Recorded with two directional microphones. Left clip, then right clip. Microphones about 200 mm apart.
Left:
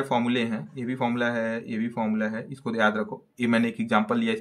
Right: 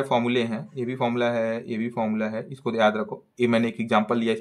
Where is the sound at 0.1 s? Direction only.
20° right (ahead or behind).